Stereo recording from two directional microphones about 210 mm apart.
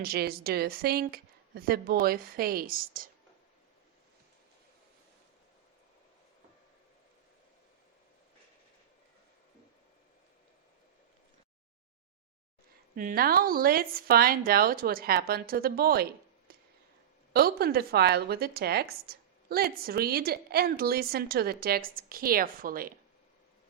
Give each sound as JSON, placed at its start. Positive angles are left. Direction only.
{"t": 0.0, "sound": "speech", "side_deg": -45}
{"t": 13.0, "sound": "speech", "side_deg": -45}
{"t": 16.5, "sound": "a sound", "side_deg": -45}
{"t": 17.3, "sound": "speech", "side_deg": -45}